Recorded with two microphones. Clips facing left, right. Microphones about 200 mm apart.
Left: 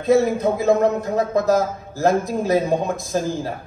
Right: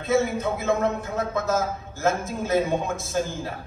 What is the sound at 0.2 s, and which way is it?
A man's voice, 35° left (ahead or behind).